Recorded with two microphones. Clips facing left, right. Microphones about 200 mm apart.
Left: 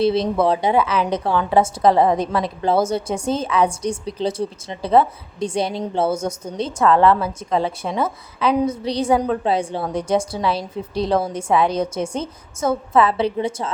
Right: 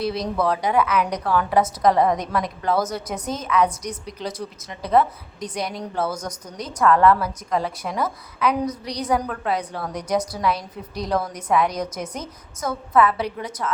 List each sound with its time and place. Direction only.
0.0 s a woman's voice: 25° left (ahead or behind)